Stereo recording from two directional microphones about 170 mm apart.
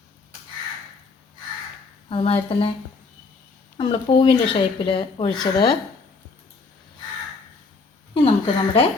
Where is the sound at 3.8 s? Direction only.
30° left (ahead or behind).